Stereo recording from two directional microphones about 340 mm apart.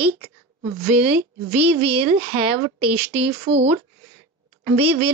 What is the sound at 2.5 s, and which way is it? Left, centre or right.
Speech, right.